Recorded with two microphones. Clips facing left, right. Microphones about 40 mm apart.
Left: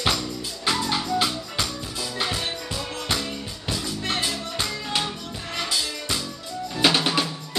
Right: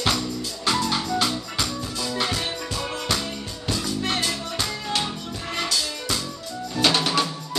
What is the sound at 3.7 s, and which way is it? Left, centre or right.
Music, centre.